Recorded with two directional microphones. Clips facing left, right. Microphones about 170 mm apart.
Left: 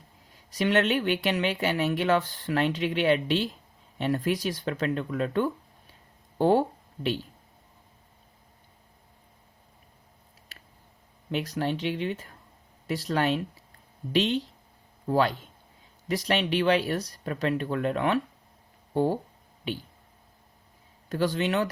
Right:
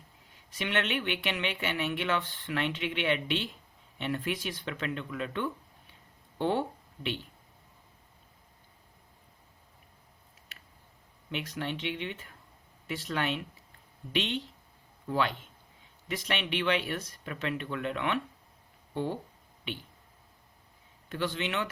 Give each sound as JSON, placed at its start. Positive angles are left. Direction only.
{"t": 0.3, "sound": "speech", "side_deg": 40}
{"t": 11.3, "sound": "speech", "side_deg": 40}
{"t": 21.1, "sound": "speech", "side_deg": 40}